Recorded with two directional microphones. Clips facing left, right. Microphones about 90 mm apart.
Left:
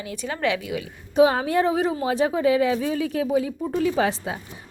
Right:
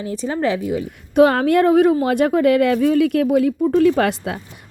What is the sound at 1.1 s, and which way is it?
Speech, 60° right (ahead or behind).